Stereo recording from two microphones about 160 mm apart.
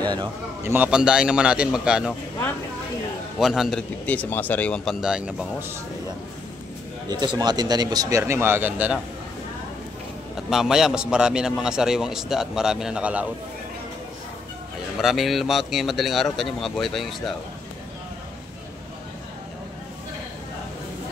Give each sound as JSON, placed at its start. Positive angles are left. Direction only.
{"t": 0.7, "sound": "a man's voice", "side_deg": -10}
{"t": 3.3, "sound": "a man's voice", "side_deg": 0}
{"t": 5.0, "sound": "a man's voice", "side_deg": -5}
{"t": 7.1, "sound": "speech", "side_deg": -25}
{"t": 10.5, "sound": "a man's voice", "side_deg": 0}
{"t": 15.0, "sound": "a man's voice", "side_deg": 0}